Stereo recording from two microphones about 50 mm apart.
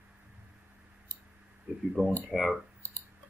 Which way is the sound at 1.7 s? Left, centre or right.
Centre.